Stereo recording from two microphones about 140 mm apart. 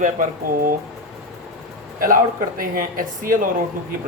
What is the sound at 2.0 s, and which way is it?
Speech, 85° right.